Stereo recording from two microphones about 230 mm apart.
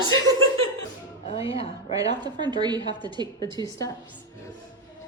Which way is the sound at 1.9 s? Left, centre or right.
Centre.